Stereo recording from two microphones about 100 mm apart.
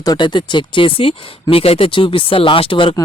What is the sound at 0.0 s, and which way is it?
Speech, 45° left (ahead or behind).